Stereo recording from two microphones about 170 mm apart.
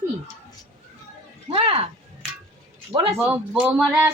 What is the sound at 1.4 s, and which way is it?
Speech, 35° right (ahead or behind).